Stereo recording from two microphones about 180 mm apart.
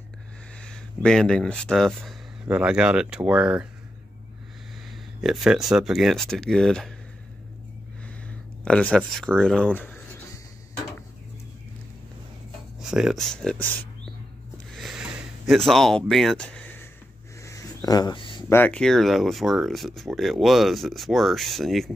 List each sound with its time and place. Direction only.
0.6 s speech: 5° left (ahead or behind)
5.2 s speech: centre (ahead or behind)
8.6 s speech: 5° left (ahead or behind)
12.8 s speech: 5° right (ahead or behind)
14.8 s a sound: 5° right (ahead or behind); by 18.4 s 25° left (ahead or behind)
18.5 s speech: 10° left (ahead or behind)